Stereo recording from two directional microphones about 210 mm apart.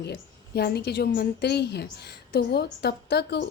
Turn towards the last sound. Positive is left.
turn(degrees=50)  # may be behind; listen again after turning